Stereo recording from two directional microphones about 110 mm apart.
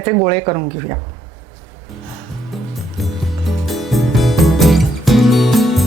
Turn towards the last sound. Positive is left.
turn(degrees=0)  # may be behind; listen again after turning